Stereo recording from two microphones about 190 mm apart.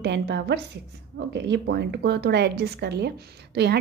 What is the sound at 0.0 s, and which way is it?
A woman's voice, 65° right (ahead or behind).